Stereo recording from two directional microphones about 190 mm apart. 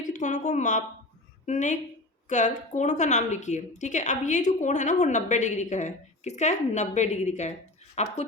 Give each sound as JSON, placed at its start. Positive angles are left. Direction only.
{"t": 0.1, "sound": "a woman's voice", "side_deg": 40}